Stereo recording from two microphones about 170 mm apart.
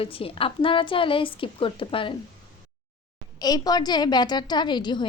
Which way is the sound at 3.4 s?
25° left (ahead or behind).